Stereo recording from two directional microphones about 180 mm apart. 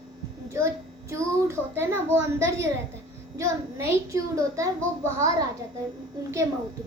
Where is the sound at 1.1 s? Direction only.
15° right (ahead or behind).